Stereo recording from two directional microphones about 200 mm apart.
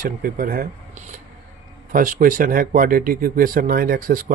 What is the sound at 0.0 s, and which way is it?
Speech, 45° right (ahead or behind).